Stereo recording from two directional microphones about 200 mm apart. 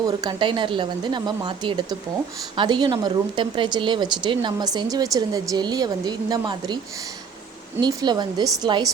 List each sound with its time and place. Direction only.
0.0 s speech: 20° right (ahead or behind)
7.8 s speech: 20° right (ahead or behind)